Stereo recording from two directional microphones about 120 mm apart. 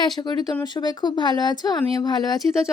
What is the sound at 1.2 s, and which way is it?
Speech, 40° left (ahead or behind).